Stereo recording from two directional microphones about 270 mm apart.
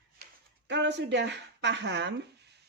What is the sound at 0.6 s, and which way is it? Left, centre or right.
Speech, right.